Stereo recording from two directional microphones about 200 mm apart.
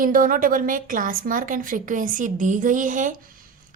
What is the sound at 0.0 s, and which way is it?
A woman's voice, 45° right (ahead or behind).